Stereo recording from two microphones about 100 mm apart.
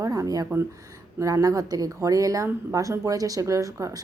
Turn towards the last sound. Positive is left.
turn(degrees=-30)  # may be behind; listen again after turning